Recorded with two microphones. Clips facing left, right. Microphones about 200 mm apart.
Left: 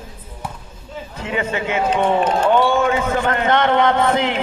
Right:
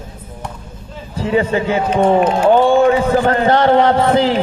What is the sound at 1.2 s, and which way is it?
A man's voice, 35° right (ahead or behind).